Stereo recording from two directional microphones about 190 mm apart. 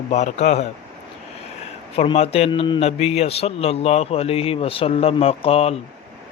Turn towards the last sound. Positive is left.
turn(degrees=30)  # may be behind; listen again after turning